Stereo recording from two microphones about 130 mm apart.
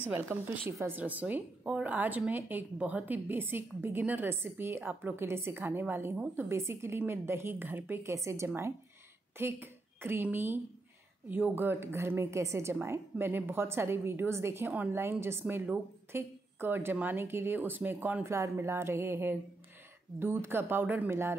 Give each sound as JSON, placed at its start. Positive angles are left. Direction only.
{"t": 0.1, "sound": "a woman's voice", "side_deg": -15}